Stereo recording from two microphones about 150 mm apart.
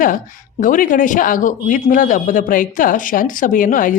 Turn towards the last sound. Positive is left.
turn(degrees=65)  # may be behind; listen again after turning